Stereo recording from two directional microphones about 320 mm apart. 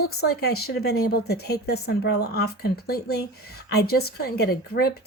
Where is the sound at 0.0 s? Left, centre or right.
Left.